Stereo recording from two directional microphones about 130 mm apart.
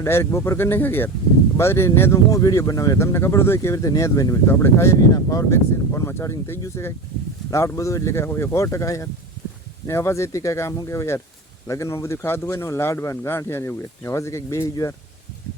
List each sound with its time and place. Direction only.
0.0 s speech: 20° left (ahead or behind)